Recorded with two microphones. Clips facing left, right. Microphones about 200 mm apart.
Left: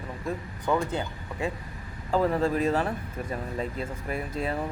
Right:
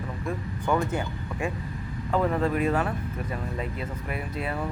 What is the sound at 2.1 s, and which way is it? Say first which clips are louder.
Speech: left 1 dB; 30° left (ahead or behind).